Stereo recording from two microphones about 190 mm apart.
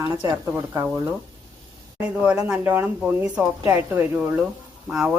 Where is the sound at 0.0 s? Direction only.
20° right (ahead or behind).